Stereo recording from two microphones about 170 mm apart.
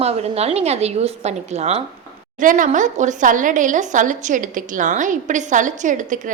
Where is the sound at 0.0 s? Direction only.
40° right (ahead or behind).